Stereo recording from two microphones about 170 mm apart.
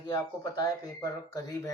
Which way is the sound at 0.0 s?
25° left (ahead or behind).